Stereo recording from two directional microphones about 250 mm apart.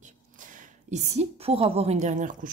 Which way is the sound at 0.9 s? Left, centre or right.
Right.